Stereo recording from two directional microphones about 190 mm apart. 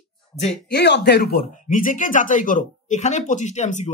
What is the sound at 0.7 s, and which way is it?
Speech, 65° left (ahead or behind).